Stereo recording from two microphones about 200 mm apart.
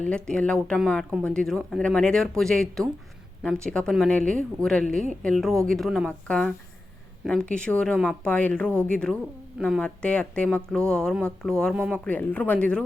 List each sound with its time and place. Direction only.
0.0 s speech: 5° left (ahead or behind)
12.0 s speech: 10° left (ahead or behind)